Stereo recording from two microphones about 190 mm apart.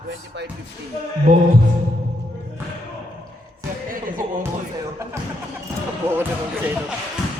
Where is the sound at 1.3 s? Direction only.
45° right (ahead or behind).